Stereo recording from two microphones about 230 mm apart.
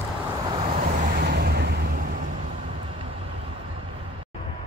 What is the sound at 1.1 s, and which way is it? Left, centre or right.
Vehicle, right.